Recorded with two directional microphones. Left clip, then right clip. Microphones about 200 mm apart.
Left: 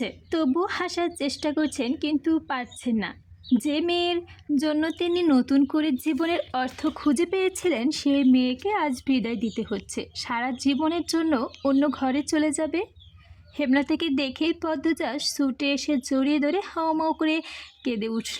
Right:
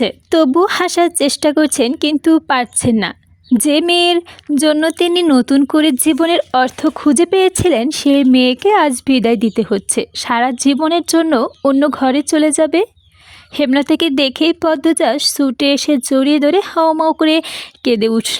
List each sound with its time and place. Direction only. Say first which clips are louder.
0.0 s speech: right 14 dB; 45° right (ahead or behind)